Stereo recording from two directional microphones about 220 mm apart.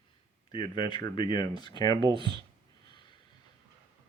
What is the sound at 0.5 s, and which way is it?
Speech, 20° left (ahead or behind).